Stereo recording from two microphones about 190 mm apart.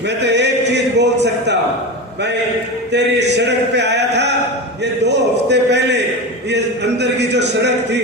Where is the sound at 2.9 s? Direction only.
65° right (ahead or behind).